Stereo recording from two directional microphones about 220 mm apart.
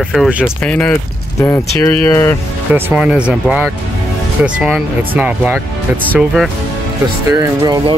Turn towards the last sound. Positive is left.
turn(degrees=-15)  # may be behind; listen again after turning